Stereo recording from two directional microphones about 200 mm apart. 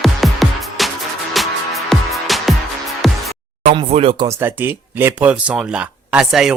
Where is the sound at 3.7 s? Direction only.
25° right (ahead or behind).